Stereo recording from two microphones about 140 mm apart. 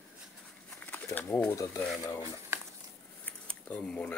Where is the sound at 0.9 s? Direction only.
10° left (ahead or behind).